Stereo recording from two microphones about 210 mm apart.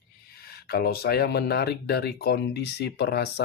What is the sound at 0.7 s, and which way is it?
Speech, 45° left (ahead or behind).